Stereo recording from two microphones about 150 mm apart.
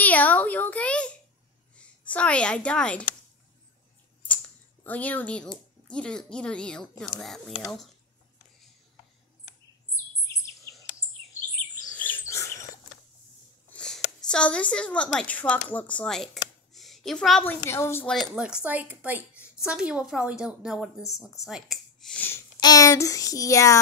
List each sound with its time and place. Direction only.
0.0 s a sound: 10° left (ahead or behind)
2.0 s speech: 10° left (ahead or behind)
4.8 s speech: 10° left (ahead or behind)
10.2 s bird vocalization: 20° left (ahead or behind)
11.9 s chirp: 10° left (ahead or behind)
13.7 s speech: 5° left (ahead or behind)
16.7 s a sound: centre (ahead or behind)
17.6 s speech: 15° left (ahead or behind)
18.1 s speech: 5° right (ahead or behind)
21.5 s a sound: centre (ahead or behind)
22.6 s child singing: 25° left (ahead or behind)